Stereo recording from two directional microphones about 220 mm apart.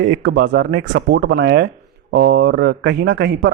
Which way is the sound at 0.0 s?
50° right (ahead or behind).